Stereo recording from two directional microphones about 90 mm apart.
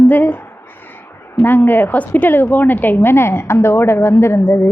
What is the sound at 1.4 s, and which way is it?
A woman's voice, 20° left (ahead or behind).